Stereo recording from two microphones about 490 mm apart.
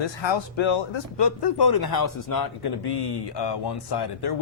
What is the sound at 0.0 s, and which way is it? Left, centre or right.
Speech, left.